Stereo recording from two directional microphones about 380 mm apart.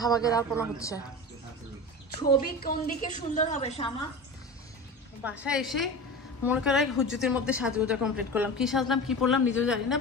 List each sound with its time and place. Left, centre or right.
0.0 s speech: centre
2.2 s a woman's voice: left
5.2 s a woman's voice: centre